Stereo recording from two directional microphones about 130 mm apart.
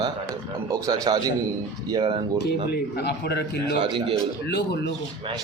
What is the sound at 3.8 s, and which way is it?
Speech, 40° right (ahead or behind).